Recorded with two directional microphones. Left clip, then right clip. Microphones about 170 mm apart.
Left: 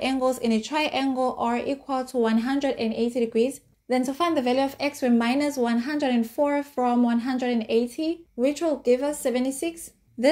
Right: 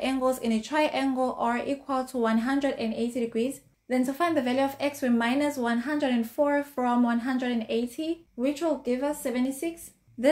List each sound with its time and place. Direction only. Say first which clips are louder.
0.0 s speech: left 3 dB; 30° left (ahead or behind)
8.4 s speech: left 4 dB; 45° left (ahead or behind)